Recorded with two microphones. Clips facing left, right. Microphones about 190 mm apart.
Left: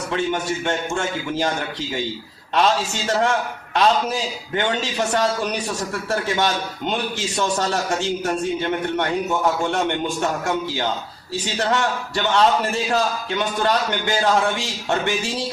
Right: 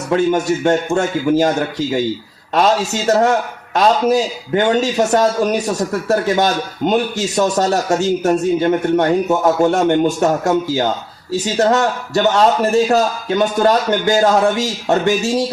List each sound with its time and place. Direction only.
0.1 s a man's voice: 40° right (ahead or behind)